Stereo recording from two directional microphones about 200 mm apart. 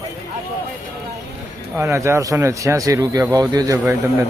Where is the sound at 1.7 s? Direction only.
15° right (ahead or behind).